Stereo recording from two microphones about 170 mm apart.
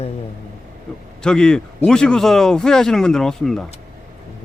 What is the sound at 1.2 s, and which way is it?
Speech, 5° left (ahead or behind).